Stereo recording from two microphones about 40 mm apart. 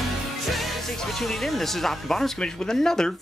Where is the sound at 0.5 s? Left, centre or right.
Centre.